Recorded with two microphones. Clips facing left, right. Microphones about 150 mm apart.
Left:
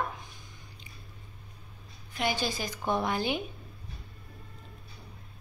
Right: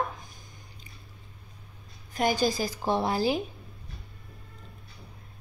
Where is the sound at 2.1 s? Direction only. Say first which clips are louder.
Right 5 dB; 40° right (ahead or behind).